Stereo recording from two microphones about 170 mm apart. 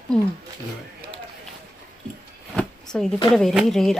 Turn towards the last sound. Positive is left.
turn(degrees=0)  # may be behind; listen again after turning